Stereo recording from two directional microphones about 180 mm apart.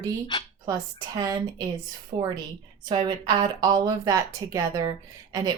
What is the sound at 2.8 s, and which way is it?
Speech, 25° right (ahead or behind).